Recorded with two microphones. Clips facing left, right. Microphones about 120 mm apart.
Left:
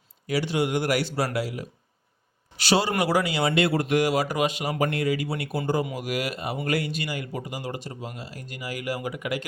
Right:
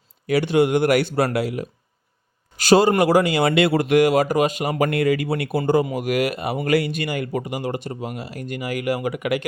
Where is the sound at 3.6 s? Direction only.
85° right; by 4.8 s 50° right (ahead or behind).